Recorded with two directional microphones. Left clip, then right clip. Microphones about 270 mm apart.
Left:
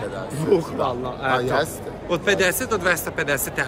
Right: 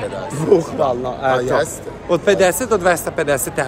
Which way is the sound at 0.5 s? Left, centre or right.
Centre.